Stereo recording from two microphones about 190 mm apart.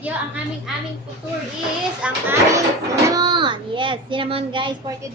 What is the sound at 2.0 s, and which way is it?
Child singing, 10° right (ahead or behind).